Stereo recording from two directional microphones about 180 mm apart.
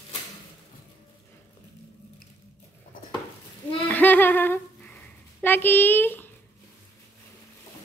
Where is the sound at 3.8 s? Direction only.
10° left (ahead or behind).